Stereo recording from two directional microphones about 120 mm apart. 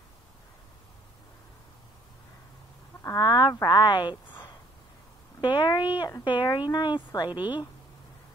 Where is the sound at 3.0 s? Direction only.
30° left (ahead or behind).